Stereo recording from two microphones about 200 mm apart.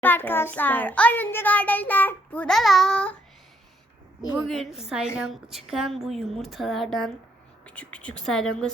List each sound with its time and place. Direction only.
0.0 s a child's voice: 10° left (ahead or behind)
4.4 s a woman's voice: centre (ahead or behind)